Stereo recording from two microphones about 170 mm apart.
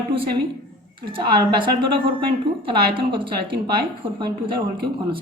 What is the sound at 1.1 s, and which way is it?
A woman's voice, 30° right (ahead or behind).